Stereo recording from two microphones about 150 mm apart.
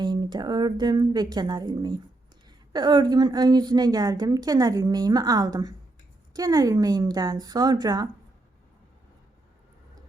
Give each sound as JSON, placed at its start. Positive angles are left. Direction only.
{"t": 0.0, "sound": "a woman's voice", "side_deg": -30}